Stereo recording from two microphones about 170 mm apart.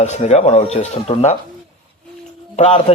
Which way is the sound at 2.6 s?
35° left (ahead or behind).